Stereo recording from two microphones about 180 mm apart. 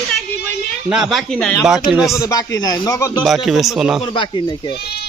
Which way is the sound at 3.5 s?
Centre (ahead or behind).